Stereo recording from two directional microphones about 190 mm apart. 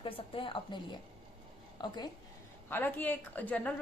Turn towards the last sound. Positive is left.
turn(degrees=10)  # may be behind; listen again after turning